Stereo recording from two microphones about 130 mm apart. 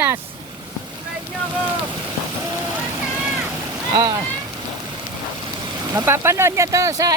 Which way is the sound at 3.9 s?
30° right (ahead or behind).